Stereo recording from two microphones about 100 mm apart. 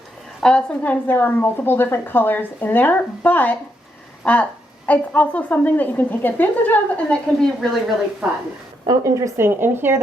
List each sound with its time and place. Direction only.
0.4 s a woman's voice: 10° left (ahead or behind)
8.2 s a woman's voice: 5° right (ahead or behind)
8.9 s speech: 30° right (ahead or behind)